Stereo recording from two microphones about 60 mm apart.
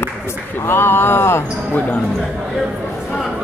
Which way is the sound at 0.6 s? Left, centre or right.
Left.